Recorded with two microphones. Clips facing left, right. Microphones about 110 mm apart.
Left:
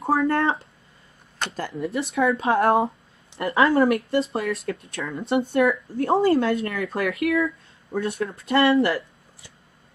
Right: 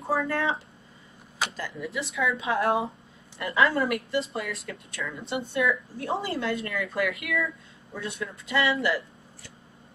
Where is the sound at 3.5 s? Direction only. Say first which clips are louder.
Left 4 dB; 30° left (ahead or behind).